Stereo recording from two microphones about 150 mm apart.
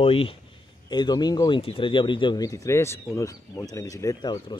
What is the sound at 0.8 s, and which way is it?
Speech, 30° left (ahead or behind).